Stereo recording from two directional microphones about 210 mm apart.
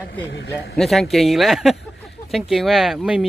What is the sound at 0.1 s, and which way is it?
Speech, 55° left (ahead or behind).